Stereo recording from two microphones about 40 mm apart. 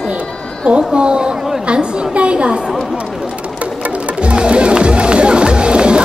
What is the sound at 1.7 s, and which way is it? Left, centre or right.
Speech, right.